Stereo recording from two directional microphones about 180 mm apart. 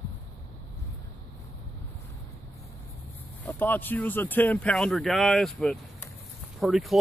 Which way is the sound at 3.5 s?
10° left (ahead or behind).